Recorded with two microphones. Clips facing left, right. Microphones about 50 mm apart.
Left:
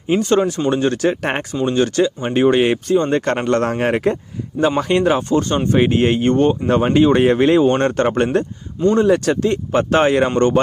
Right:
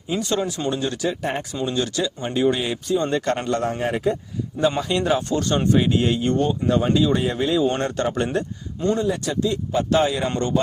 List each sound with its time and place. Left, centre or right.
0.1 s speech: left
1.6 s speech: left
4.8 s speech: left
9.0 s speech: left